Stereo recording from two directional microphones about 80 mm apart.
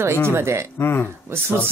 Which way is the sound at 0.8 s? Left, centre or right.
Left.